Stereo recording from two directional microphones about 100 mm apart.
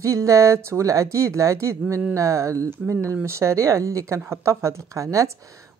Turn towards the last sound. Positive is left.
turn(degrees=-30)  # may be behind; listen again after turning